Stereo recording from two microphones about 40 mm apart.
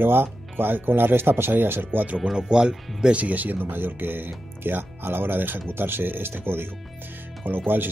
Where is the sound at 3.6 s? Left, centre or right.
Right.